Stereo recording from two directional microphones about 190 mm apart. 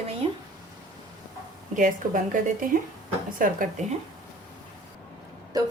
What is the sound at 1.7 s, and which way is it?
A woman's voice, 45° right (ahead or behind).